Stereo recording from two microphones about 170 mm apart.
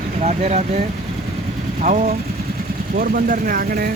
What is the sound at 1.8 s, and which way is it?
Speech, 45° right (ahead or behind).